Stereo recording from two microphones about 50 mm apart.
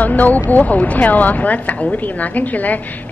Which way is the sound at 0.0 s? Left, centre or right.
Left.